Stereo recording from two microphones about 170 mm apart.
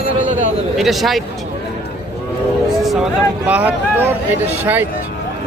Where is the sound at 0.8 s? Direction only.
Centre (ahead or behind).